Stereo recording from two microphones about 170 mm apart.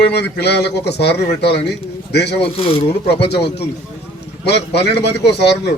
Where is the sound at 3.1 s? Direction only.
75° left (ahead or behind).